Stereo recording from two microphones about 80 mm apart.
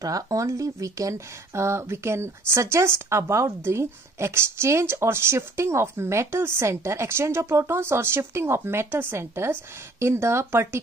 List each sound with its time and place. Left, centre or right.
0.0 s speech: right